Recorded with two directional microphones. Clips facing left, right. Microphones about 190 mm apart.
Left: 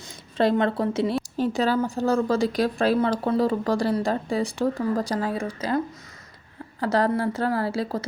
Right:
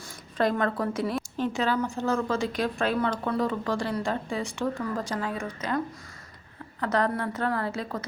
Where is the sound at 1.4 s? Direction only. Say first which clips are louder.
Left 4 dB; 35° left (ahead or behind).